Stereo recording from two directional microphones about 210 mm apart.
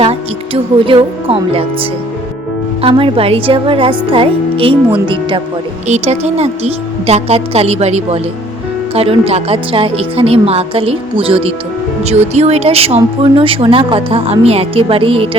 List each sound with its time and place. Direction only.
0.0 s speech: 25° right (ahead or behind)
2.8 s a woman's voice: 25° right (ahead or behind)